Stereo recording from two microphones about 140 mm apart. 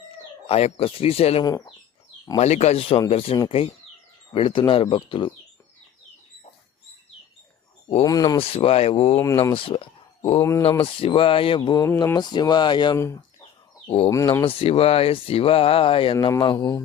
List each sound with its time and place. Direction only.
0.4 s speech: 45° left (ahead or behind)
1.5 s speech: 25° left (ahead or behind)
2.4 s speech: 55° left (ahead or behind); by 5.3 s 35° left (ahead or behind)
8.0 s speech: 25° left (ahead or behind)
8.4 s speech: 45° left (ahead or behind)
9.1 s speech: 20° left (ahead or behind)
9.6 s speech: 40° left (ahead or behind)
13.8 s speech: 45° left (ahead or behind)
14.1 s speech: 20° left (ahead or behind)
14.4 s speech: 45° left (ahead or behind)
16.4 s speech: 30° left (ahead or behind)